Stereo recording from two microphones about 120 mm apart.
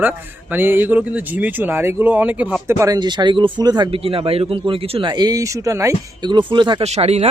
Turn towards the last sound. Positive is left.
turn(degrees=-65)  # may be behind; listen again after turning